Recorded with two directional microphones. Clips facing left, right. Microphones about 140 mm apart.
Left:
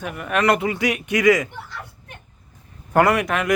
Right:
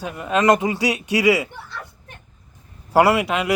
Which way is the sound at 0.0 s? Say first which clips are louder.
Right 2 dB; 20° right (ahead or behind).